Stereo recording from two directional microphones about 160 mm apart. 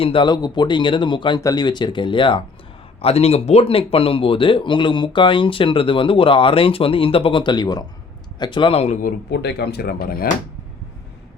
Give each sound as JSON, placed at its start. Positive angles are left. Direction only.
{"t": 0.0, "sound": "speech", "side_deg": 30}
{"t": 9.0, "sound": "speech", "side_deg": 75}